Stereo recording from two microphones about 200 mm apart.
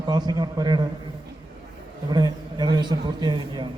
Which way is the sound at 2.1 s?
20° right (ahead or behind).